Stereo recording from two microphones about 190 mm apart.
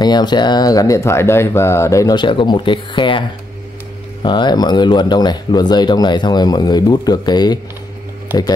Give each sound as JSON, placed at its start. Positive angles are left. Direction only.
{"t": 0.0, "sound": "speech", "side_deg": 20}